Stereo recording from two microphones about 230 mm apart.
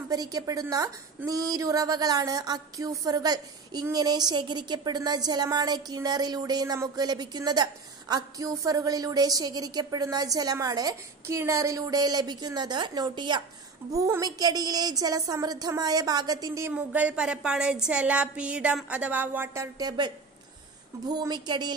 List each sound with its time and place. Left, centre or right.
0.1 s a woman's voice: centre
21.1 s a woman's voice: centre